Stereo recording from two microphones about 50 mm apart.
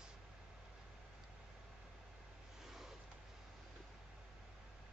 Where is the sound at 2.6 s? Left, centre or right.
Centre.